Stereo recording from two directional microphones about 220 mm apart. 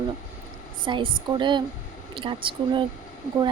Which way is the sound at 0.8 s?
20° right (ahead or behind).